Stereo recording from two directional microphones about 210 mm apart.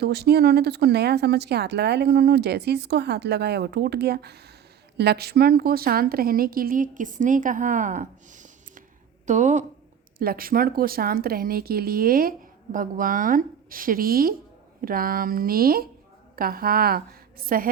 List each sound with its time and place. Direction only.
0.0 s a woman's voice: 50° right (ahead or behind)